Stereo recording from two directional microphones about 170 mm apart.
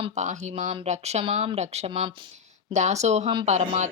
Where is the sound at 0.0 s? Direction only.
45° right (ahead or behind).